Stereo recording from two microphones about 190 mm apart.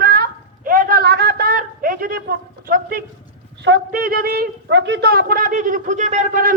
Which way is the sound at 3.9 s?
50° right (ahead or behind).